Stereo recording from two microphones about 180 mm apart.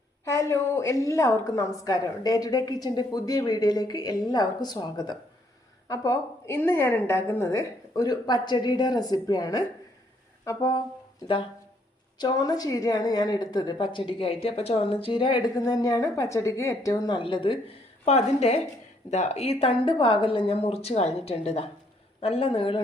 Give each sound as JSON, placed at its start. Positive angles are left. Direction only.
{"t": 0.3, "sound": "a woman's voice", "side_deg": 15}
{"t": 12.2, "sound": "a woman's voice", "side_deg": 20}